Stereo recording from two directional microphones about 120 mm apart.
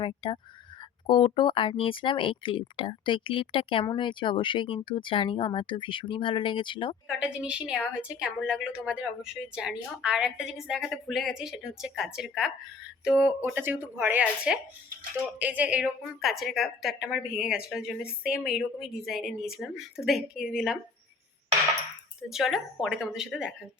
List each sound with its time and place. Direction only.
0.0 s speech: 45° left (ahead or behind)
7.2 s a woman's voice: 10° right (ahead or behind)
13.4 s speech: 20° right (ahead or behind)
16.2 s a woman's voice: centre (ahead or behind)
22.3 s a woman's voice: 5° right (ahead or behind)